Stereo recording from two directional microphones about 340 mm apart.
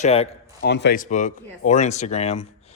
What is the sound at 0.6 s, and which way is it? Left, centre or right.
Speech, left.